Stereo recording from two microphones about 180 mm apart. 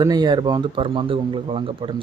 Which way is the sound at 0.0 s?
20° right (ahead or behind).